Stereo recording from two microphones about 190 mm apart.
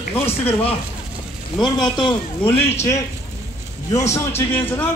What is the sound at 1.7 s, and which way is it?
A man's voice, 25° left (ahead or behind).